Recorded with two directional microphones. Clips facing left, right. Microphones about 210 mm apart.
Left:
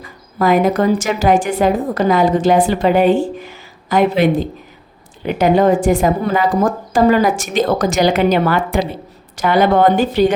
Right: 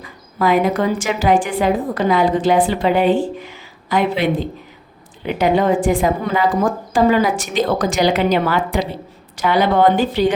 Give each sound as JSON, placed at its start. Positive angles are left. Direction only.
{"t": 0.3, "sound": "a woman's voice", "side_deg": 45}